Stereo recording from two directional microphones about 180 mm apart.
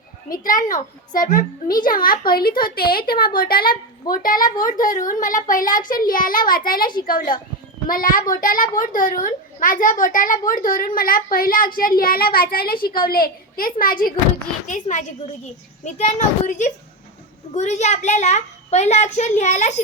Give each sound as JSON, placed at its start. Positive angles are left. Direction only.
{"t": 0.3, "sound": "a woman's voice", "side_deg": 50}